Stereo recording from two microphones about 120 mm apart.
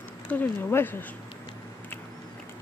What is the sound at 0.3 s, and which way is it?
Speech, 15° left (ahead or behind).